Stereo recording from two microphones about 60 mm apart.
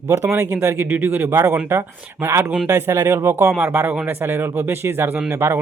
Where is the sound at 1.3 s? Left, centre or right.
Right.